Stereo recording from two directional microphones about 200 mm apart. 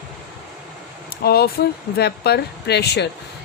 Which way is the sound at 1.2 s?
50° left (ahead or behind).